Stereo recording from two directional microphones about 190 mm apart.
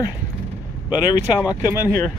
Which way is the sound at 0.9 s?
20° left (ahead or behind).